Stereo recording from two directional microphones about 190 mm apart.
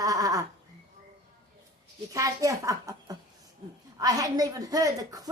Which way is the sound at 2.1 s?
15° right (ahead or behind).